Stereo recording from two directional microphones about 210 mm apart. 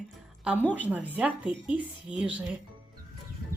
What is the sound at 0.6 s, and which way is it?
Speech, 5° left (ahead or behind).